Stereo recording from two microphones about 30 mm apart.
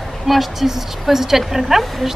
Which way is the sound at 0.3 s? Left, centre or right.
Centre.